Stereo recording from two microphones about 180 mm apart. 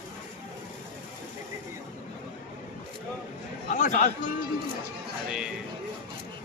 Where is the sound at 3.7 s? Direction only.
45° left (ahead or behind).